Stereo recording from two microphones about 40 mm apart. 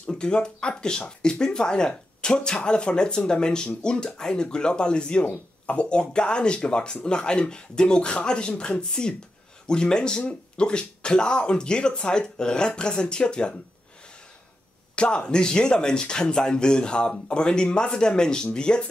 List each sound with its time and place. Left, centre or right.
0.1 s speech: left
15.0 s speech: left